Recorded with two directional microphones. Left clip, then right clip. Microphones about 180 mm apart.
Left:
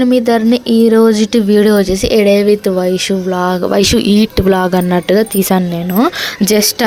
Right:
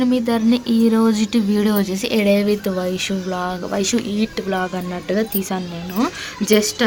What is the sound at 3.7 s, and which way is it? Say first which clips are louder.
Speech: left 10 dB; 45° left (ahead or behind).